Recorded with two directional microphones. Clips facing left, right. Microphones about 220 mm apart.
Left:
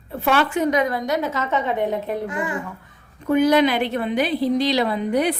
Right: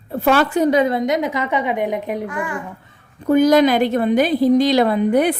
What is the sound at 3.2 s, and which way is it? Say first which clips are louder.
A woman's voice: right 4 dB; 40° right (ahead or behind).